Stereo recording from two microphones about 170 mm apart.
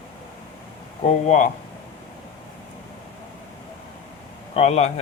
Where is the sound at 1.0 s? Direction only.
45° left (ahead or behind).